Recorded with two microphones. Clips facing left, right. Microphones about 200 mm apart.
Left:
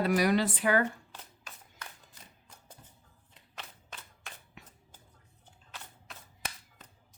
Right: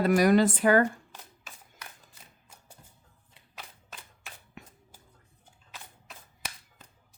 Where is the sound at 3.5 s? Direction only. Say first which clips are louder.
Even; 5° right (ahead or behind).